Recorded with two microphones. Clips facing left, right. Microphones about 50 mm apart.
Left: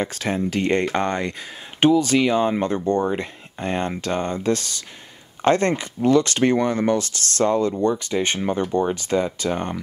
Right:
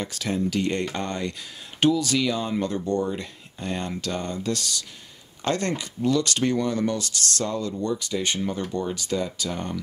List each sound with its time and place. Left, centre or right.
0.0 s speech: left
1.8 s speech: left